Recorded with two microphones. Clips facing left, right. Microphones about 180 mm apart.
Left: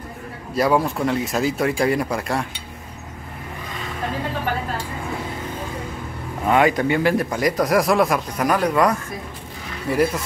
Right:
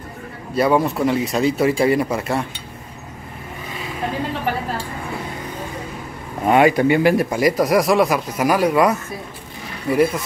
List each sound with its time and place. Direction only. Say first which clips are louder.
0.6 s speech: right 2 dB; centre (ahead or behind)
6.4 s speech: right 3 dB; 10° right (ahead or behind)